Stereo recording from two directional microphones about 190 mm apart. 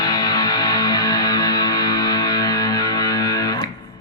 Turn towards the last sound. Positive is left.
turn(degrees=20)  # may be behind; listen again after turning